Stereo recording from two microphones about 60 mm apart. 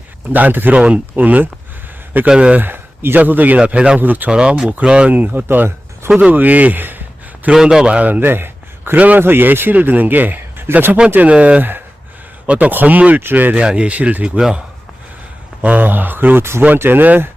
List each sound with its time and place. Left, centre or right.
0.3 s speech: right
2.6 s a sound: right
3.2 s speech: right
4.3 s speech: centre
5.1 s speech: right
7.5 s a man's voice: centre; by 9.0 s right
9.0 s speech: right
9.2 s speech: right
11.1 s speech: right
13.6 s speech: centre
15.6 s speech: right